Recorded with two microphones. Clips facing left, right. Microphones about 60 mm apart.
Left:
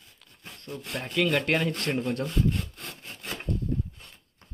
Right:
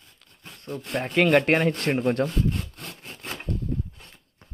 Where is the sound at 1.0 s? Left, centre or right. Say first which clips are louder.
Right 6 dB; right.